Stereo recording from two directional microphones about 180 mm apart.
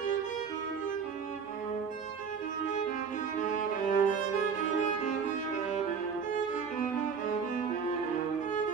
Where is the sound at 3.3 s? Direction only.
45° left (ahead or behind).